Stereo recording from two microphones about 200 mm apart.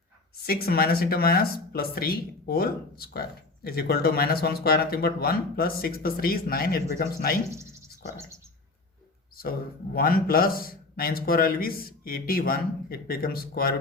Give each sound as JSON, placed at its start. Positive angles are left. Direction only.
{"t": 0.4, "sound": "speech", "side_deg": 50}
{"t": 9.4, "sound": "speech", "side_deg": 45}